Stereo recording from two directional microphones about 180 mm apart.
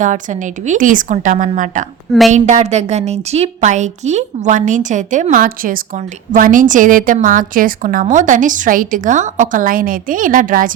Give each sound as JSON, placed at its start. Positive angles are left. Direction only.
{"t": 0.0, "sound": "a woman's voice", "side_deg": -45}